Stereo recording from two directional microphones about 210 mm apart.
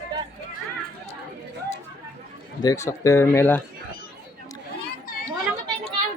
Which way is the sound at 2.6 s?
15° left (ahead or behind).